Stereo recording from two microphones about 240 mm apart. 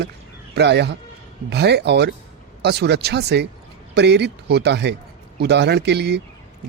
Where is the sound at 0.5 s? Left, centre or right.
Right.